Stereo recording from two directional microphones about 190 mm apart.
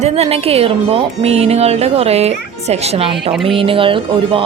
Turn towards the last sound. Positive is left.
turn(degrees=-30)  # may be behind; listen again after turning